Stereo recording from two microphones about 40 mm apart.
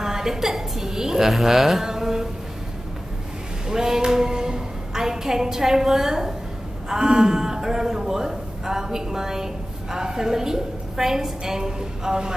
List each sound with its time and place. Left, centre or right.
0.0 s a man's voice: centre
3.6 s a woman's voice: centre